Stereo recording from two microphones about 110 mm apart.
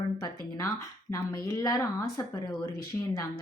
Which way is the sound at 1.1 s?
30° left (ahead or behind).